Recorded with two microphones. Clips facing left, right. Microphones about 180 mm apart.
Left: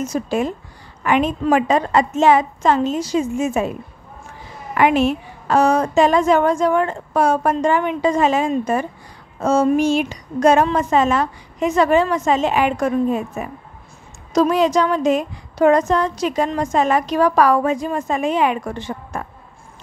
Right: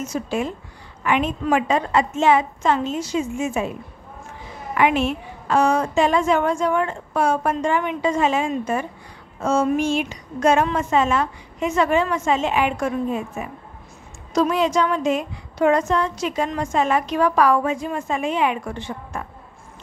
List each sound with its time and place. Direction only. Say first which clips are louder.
0.0 s a woman's voice: left 4 dB; 40° left (ahead or behind)
4.7 s a woman's voice: left 4 dB; 40° left (ahead or behind)